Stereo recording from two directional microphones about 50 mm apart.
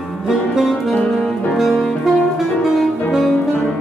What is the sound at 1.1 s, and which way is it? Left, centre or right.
Saxophone, centre.